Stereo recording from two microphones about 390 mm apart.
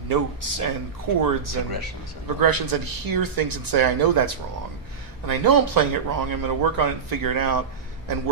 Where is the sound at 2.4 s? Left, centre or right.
Right.